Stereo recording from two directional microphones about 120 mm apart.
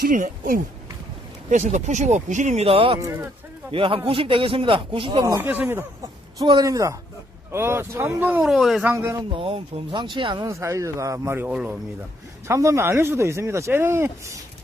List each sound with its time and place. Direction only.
1.5 s speech: 90° right
2.6 s speech: 50° right (ahead or behind)
3.0 s speech: 25° right (ahead or behind)
3.7 s speech: 45° right (ahead or behind)
5.2 s speech: 20° right (ahead or behind)
6.4 s speech: 35° right (ahead or behind); by 8.4 s 15° right (ahead or behind)
8.4 s speech: centre (ahead or behind)
9.3 s speech: 50° right (ahead or behind)
10.4 s speech: 25° right (ahead or behind)
12.5 s speech: 25° right (ahead or behind)